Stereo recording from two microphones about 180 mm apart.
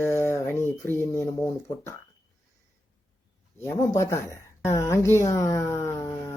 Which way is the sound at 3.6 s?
15° left (ahead or behind).